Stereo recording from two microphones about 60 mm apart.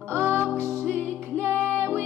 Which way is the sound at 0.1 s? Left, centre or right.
Right.